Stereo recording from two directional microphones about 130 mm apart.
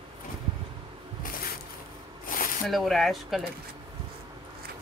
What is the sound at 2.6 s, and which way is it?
Speech, centre (ahead or behind).